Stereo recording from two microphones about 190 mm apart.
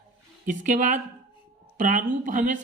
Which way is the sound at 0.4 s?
40° right (ahead or behind).